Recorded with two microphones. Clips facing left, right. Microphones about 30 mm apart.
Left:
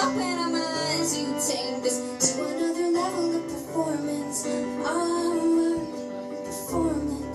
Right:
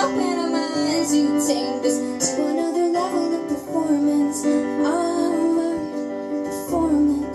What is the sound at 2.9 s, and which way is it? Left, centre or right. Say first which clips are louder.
Music: right 4 dB; right.